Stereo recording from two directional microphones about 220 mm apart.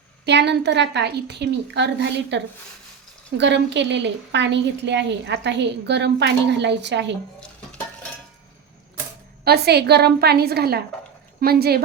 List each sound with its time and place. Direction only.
0.3 s a woman's voice: 50° right (ahead or behind)
9.4 s a woman's voice: 45° right (ahead or behind)